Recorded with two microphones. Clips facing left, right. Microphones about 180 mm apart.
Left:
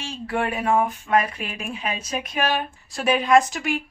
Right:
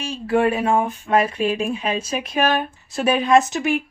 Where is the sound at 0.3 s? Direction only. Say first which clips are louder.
Right 5 dB; 25° right (ahead or behind).